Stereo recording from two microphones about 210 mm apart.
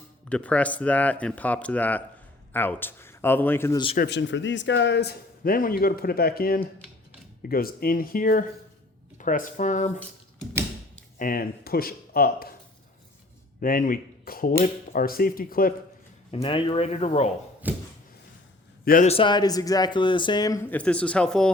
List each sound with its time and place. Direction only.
0.3 s speech: 5° left (ahead or behind)
3.9 s a man's voice: 55° left (ahead or behind); by 10.0 s 35° left (ahead or behind)
11.2 s a man's voice: 45° left (ahead or behind)
13.6 s a man's voice: 40° left (ahead or behind)
16.3 s speech: 25° left (ahead or behind)
17.6 s a sound: 10° right (ahead or behind)
18.9 s speech: 40° left (ahead or behind)
19.1 s speech: 20° left (ahead or behind); by 21.5 s 5° left (ahead or behind)